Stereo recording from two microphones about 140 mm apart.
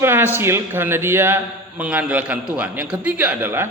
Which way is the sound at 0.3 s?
15° right (ahead or behind).